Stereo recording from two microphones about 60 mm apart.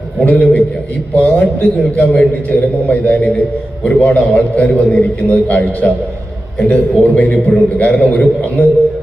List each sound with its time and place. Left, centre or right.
0.3 s a man's voice: left